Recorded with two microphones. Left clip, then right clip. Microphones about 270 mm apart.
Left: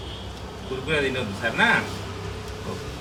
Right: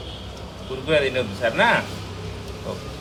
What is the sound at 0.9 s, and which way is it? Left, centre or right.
Speech, centre.